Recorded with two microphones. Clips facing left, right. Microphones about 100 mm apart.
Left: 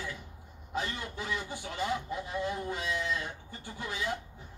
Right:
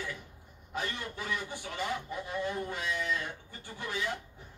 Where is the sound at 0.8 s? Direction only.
25° left (ahead or behind).